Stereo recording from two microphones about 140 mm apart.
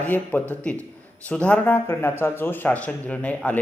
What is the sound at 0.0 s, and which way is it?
A man's voice, 10° left (ahead or behind).